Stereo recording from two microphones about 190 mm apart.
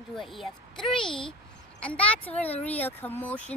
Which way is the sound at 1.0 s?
25° left (ahead or behind).